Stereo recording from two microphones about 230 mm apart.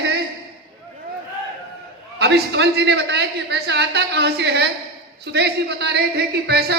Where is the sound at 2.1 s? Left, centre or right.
Right.